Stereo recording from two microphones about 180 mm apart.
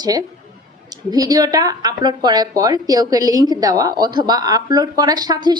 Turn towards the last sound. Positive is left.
turn(degrees=-20)  # may be behind; listen again after turning